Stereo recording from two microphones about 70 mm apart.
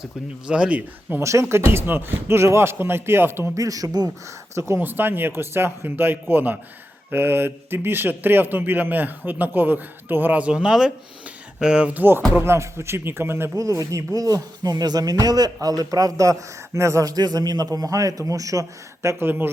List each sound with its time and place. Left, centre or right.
0.0 s speech: centre
1.2 s speech: right
3.5 s speech: right
4.5 s speech: right; by 12.0 s centre
12.3 s speech: right
13.6 s speech: right
19.0 s speech: right